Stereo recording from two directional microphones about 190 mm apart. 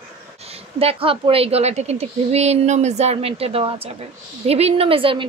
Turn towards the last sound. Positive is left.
turn(degrees=-25)  # may be behind; listen again after turning